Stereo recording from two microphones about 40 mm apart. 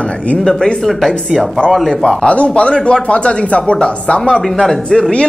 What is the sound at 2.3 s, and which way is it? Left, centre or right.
Speech, left.